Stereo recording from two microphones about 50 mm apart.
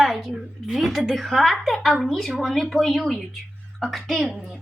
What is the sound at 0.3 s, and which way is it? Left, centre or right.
A woman's voice, centre.